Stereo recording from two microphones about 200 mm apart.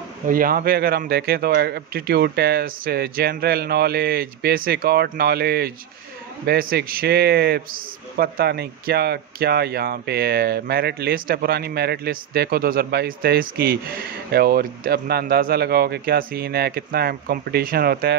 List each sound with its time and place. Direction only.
0.3 s speech: 45° right (ahead or behind)